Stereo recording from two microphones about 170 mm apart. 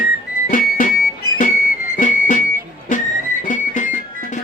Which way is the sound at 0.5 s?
55° left (ahead or behind).